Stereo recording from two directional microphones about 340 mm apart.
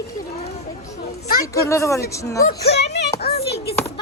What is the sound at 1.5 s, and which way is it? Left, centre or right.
Speech, centre.